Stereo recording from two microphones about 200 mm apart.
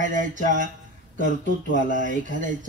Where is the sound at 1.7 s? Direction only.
40° right (ahead or behind).